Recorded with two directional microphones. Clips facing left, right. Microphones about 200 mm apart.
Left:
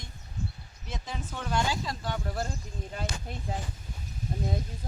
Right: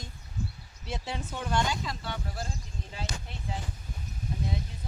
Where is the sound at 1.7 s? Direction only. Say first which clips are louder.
Left 2 dB; 40° left (ahead or behind).